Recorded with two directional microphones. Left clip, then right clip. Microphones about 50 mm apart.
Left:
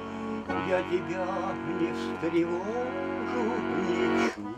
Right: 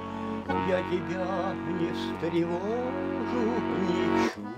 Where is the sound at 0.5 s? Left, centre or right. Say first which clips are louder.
Even; left.